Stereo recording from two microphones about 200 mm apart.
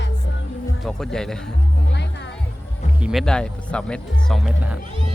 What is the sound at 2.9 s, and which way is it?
Speech, 5° right (ahead or behind).